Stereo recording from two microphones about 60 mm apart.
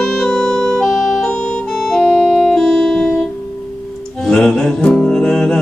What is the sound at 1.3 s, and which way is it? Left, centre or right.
Music, left.